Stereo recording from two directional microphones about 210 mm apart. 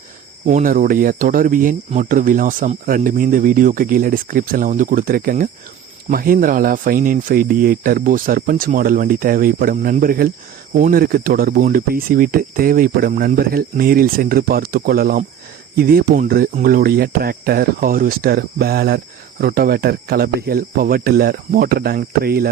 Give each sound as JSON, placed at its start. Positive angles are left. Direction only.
{"t": 0.4, "sound": "speech", "side_deg": -40}